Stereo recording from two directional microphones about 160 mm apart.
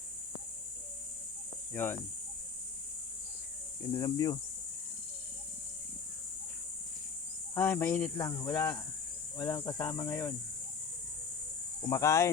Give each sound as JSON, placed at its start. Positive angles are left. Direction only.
{"t": 1.7, "sound": "speech", "side_deg": 15}
{"t": 3.9, "sound": "speech", "side_deg": 25}
{"t": 7.5, "sound": "speech", "side_deg": 15}
{"t": 11.8, "sound": "speech", "side_deg": 20}